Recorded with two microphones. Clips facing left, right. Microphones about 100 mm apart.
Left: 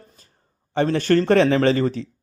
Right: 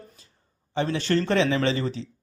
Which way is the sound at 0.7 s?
50° left (ahead or behind).